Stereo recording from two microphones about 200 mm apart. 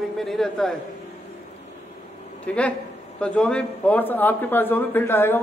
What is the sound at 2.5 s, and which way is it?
A woman's voice, 5° left (ahead or behind).